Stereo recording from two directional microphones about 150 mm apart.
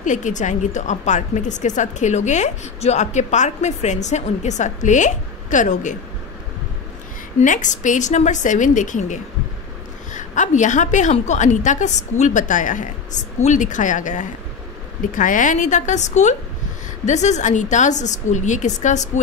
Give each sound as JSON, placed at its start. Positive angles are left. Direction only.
{"t": 0.0, "sound": "a woman's voice", "side_deg": 55}
{"t": 7.4, "sound": "a woman's voice", "side_deg": 55}